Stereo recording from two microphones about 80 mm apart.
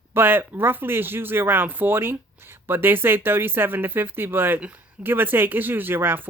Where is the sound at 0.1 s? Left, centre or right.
Right.